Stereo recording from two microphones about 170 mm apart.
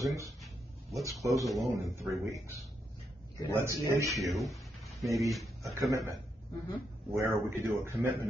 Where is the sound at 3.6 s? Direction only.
15° right (ahead or behind).